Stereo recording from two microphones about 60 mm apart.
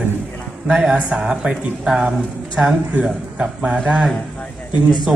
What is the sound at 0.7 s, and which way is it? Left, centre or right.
A man's voice, centre.